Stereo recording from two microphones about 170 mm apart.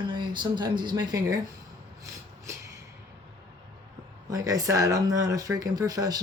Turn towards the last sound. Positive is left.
turn(degrees=-20)  # may be behind; listen again after turning